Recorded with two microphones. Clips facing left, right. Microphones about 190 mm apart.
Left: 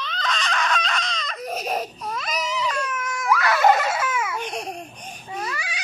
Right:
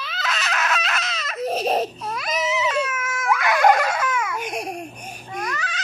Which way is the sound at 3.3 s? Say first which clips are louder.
Even; 20° right (ahead or behind).